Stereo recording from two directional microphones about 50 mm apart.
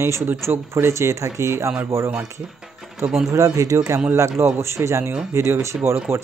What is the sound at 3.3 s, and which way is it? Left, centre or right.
Speech, right.